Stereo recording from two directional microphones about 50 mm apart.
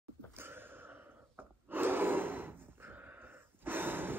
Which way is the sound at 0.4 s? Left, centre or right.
Right.